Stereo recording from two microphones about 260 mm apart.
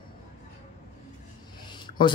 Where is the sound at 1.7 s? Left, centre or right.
Centre.